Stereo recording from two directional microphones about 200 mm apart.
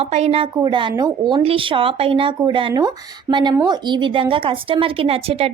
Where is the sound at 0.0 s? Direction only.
30° right (ahead or behind).